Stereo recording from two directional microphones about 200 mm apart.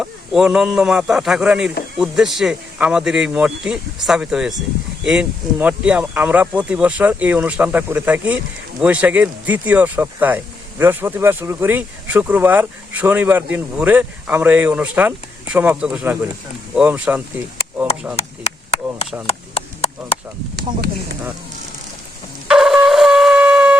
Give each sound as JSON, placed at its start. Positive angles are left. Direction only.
{"t": 0.0, "sound": "speech", "side_deg": -5}
{"t": 18.2, "sound": "a sound", "side_deg": 30}
{"t": 19.3, "sound": "chop", "side_deg": 30}
{"t": 22.4, "sound": "shofar", "side_deg": -5}